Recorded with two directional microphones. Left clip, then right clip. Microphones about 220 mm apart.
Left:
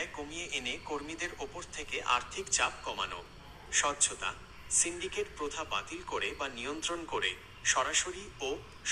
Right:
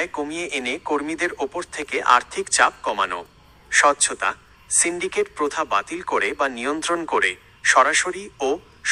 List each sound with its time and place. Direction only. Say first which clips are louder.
0.0 s a man's voice: right 13 dB; 40° right (ahead or behind)